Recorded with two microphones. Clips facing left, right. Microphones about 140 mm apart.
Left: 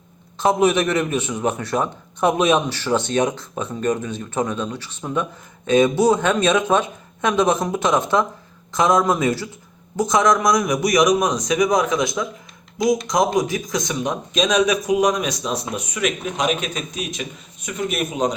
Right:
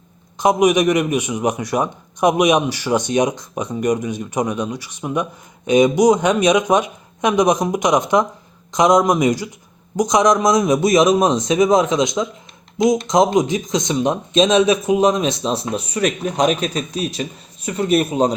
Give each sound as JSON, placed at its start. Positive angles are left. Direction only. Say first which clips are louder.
{"t": 0.3, "sound": "a man's voice", "louder": "right 3 dB", "side_deg": -15}